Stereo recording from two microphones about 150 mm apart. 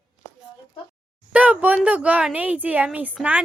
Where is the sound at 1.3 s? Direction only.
10° right (ahead or behind).